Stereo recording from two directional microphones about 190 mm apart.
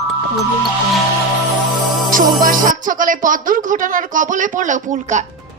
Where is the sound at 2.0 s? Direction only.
45° right (ahead or behind).